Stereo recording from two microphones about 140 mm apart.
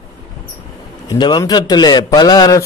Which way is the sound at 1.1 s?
30° left (ahead or behind).